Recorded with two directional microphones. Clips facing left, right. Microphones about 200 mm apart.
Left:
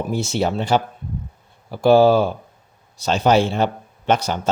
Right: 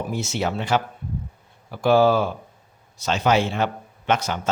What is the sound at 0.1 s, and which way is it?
Speech, 30° left (ahead or behind).